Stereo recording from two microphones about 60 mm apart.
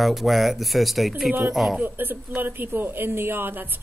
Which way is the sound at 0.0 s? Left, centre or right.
Centre.